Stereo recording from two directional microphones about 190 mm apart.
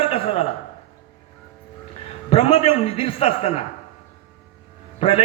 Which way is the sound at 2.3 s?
30° left (ahead or behind).